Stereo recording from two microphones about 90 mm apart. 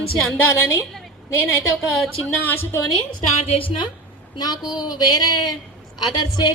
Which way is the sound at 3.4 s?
90° left.